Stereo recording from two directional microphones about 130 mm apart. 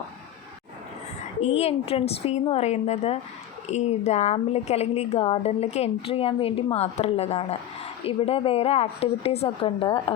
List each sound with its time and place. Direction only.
1.4 s speech: 55° left (ahead or behind)